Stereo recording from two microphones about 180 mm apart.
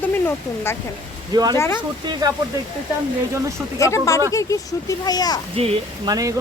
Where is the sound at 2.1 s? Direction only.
20° right (ahead or behind).